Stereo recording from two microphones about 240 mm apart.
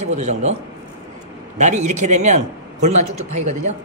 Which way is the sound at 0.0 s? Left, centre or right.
Right.